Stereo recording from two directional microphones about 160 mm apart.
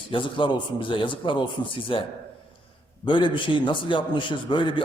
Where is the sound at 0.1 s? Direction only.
30° left (ahead or behind).